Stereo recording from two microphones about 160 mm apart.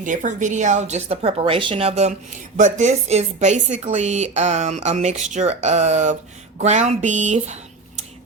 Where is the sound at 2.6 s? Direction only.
50° right (ahead or behind).